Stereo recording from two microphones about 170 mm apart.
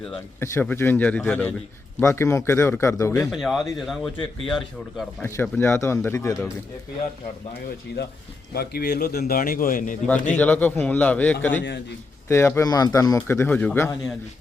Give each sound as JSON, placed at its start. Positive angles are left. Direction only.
{"t": 0.3, "sound": "speech", "side_deg": 15}
{"t": 3.3, "sound": "speech", "side_deg": 0}
{"t": 5.2, "sound": "speech", "side_deg": 15}
{"t": 8.5, "sound": "a man's voice", "side_deg": 65}
{"t": 10.3, "sound": "speech", "side_deg": 10}